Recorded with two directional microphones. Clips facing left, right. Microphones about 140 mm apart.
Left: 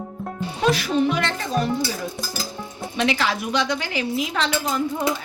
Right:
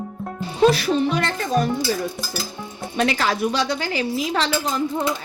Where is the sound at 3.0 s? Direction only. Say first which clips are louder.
Right 2 dB; 40° right (ahead or behind).